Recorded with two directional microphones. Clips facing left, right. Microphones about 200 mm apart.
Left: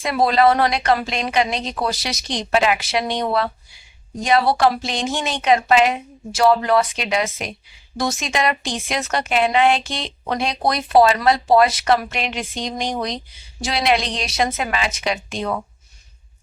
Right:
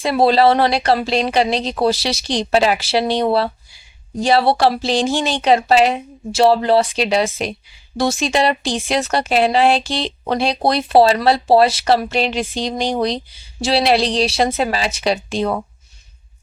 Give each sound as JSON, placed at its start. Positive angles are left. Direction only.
{"t": 0.0, "sound": "speech", "side_deg": -30}